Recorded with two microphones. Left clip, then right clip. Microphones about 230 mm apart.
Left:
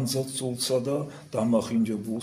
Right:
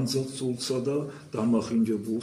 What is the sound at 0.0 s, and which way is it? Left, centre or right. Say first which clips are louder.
A man's voice: even; left.